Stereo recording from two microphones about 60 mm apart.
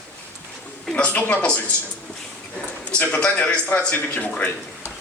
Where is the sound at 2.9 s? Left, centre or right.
Centre.